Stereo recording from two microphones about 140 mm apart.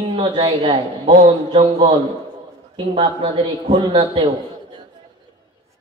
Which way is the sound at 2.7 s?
35° right (ahead or behind).